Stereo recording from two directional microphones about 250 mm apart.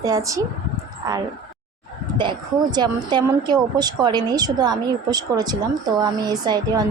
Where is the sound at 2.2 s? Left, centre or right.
Centre.